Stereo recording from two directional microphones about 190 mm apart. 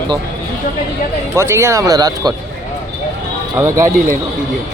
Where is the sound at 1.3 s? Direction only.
15° right (ahead or behind).